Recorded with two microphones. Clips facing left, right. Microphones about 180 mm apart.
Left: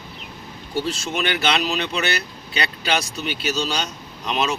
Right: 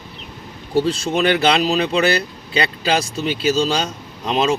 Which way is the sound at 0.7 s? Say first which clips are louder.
Right 7 dB; 35° right (ahead or behind).